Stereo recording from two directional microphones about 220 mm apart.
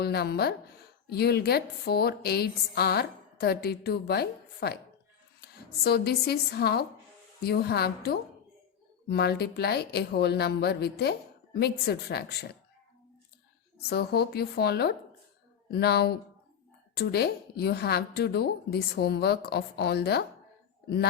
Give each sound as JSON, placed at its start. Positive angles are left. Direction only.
{"t": 0.0, "sound": "a woman's voice", "side_deg": 45}
{"t": 13.9, "sound": "a woman's voice", "side_deg": 45}